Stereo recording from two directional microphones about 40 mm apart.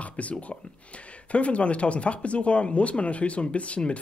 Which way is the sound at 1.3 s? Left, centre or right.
Left.